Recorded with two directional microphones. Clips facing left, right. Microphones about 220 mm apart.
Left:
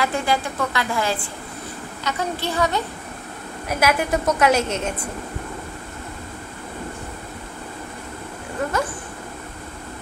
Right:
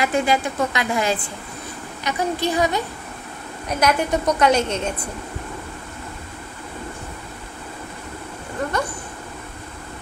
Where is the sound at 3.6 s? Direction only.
5° left (ahead or behind).